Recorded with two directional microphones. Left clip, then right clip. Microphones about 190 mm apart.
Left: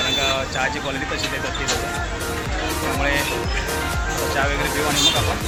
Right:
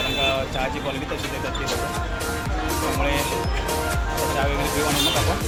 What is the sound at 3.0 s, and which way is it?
Speech, centre (ahead or behind).